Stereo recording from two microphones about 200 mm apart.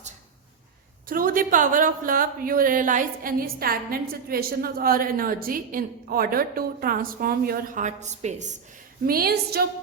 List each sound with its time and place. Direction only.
1.0 s a woman's voice: 45° right (ahead or behind)
9.0 s a woman's voice: 50° right (ahead or behind)